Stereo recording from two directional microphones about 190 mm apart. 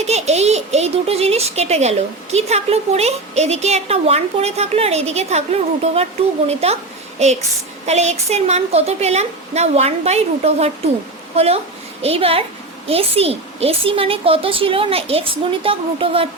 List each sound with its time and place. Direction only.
0.0 s a child's voice: 35° right (ahead or behind)